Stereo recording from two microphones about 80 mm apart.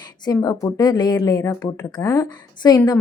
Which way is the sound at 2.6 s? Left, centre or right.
Left.